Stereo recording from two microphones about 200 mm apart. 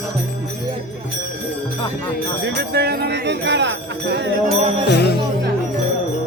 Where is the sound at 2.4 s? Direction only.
55° right (ahead or behind).